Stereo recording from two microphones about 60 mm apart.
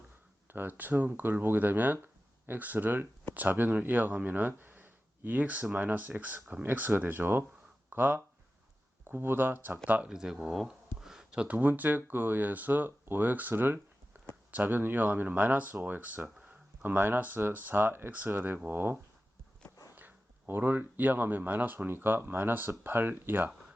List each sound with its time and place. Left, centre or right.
0.4 s speech: right
10.1 s speech: centre
10.4 s a sound: centre
11.3 s speech: right
20.0 s speech: right